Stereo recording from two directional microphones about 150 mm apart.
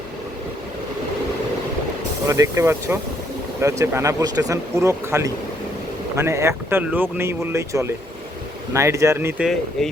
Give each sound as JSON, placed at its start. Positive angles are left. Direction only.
{"t": 2.2, "sound": "speech", "side_deg": -20}
{"t": 9.4, "sound": "speech", "side_deg": 0}